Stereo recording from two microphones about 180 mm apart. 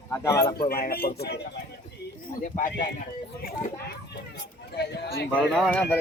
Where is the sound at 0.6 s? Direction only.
55° left (ahead or behind).